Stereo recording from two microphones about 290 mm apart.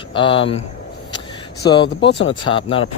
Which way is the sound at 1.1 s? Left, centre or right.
Centre.